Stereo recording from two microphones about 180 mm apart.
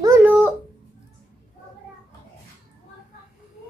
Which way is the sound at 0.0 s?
10° right (ahead or behind).